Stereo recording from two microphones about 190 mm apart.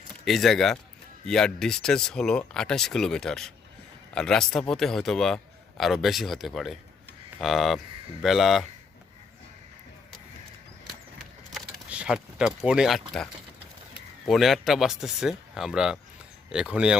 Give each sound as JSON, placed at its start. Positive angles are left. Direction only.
{"t": 0.3, "sound": "a man's voice", "side_deg": 0}
{"t": 11.5, "sound": "speech", "side_deg": -5}
{"t": 14.3, "sound": "a man's voice", "side_deg": 0}